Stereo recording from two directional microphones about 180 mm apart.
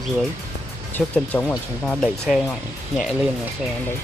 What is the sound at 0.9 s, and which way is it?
Speech, 10° left (ahead or behind).